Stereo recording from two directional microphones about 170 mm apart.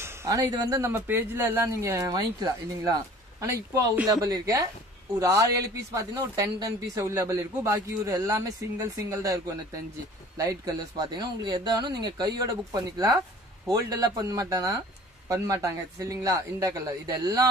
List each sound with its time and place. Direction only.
0.0 s speech: 15° right (ahead or behind)